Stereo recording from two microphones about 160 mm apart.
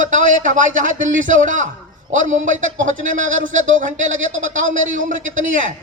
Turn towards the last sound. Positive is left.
turn(degrees=-50)  # may be behind; listen again after turning